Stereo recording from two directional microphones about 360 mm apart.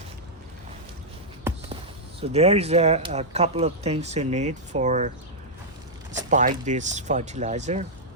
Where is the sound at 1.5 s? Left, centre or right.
Centre.